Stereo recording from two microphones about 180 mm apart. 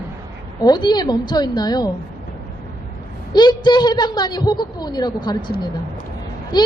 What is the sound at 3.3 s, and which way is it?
Speech, 25° left (ahead or behind).